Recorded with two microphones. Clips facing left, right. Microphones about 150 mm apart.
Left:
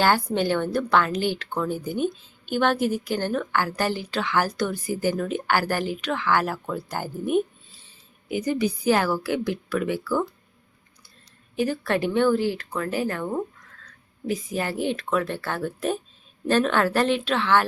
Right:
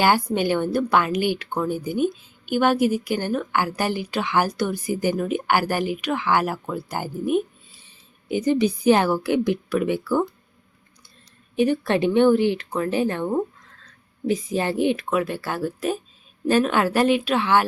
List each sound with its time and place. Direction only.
0.0 s a woman's voice: 10° right (ahead or behind)
8.3 s a woman's voice: 25° right (ahead or behind)
11.5 s a woman's voice: 20° right (ahead or behind)